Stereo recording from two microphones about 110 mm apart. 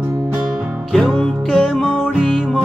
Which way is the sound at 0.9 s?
5° left (ahead or behind).